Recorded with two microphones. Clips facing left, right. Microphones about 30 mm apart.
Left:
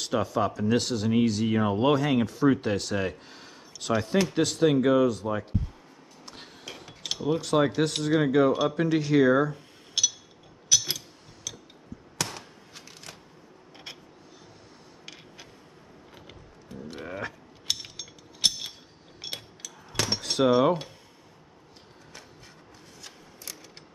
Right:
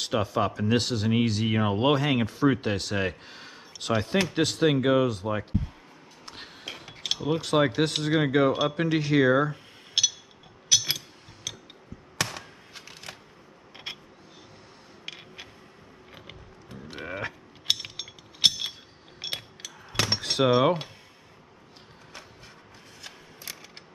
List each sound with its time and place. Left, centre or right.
0.0 s speech: right
10.7 s a sound: centre
13.9 s vehicle: right
15.0 s a sound: right
16.2 s mechanisms: right
19.2 s cutlery: right
23.0 s mechanisms: centre